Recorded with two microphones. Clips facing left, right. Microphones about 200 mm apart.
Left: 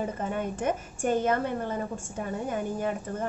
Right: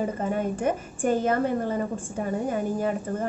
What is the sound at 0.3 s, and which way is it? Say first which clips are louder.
A woman's voice: right 3 dB; 40° right (ahead or behind).